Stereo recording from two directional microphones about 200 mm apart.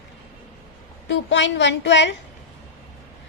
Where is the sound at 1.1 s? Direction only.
65° left (ahead or behind).